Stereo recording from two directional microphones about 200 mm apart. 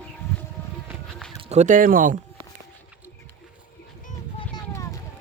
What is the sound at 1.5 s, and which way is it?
Speech, 35° right (ahead or behind).